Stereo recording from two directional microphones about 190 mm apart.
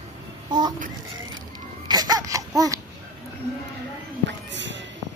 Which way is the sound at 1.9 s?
20° right (ahead or behind).